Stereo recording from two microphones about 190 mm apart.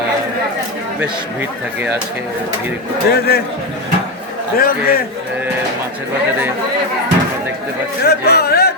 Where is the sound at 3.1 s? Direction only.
55° left (ahead or behind).